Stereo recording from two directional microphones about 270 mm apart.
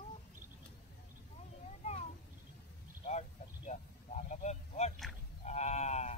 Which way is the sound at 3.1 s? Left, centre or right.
Left.